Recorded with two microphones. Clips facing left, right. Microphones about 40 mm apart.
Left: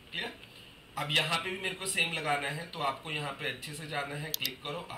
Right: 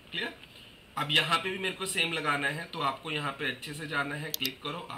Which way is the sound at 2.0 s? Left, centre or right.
Right.